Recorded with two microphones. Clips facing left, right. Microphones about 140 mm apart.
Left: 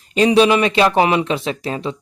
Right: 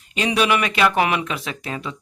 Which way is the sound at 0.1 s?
35° left (ahead or behind).